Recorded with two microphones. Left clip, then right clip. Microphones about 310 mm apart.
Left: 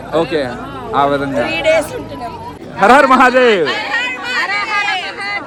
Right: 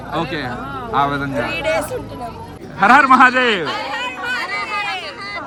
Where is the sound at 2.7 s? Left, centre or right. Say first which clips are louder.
Left 2 dB; centre.